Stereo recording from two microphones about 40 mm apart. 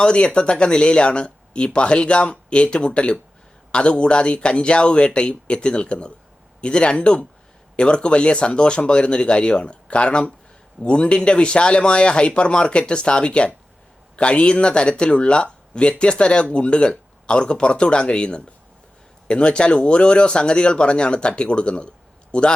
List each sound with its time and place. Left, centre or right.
0.0 s speech: left